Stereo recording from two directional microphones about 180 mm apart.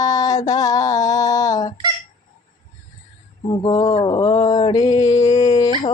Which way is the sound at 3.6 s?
25° left (ahead or behind).